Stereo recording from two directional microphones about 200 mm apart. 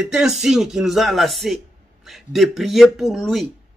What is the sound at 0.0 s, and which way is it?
A man's voice, 5° right (ahead or behind).